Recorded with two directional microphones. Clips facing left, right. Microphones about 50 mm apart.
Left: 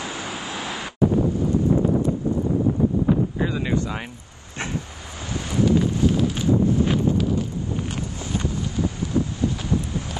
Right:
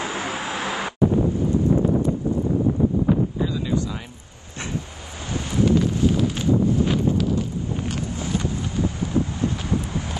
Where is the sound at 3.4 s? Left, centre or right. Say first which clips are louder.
Even; left.